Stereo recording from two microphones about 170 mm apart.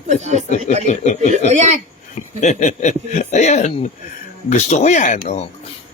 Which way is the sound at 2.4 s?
45° left (ahead or behind).